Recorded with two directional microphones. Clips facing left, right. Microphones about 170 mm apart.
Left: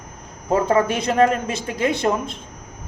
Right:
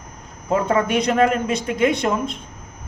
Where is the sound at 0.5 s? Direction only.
30° left (ahead or behind).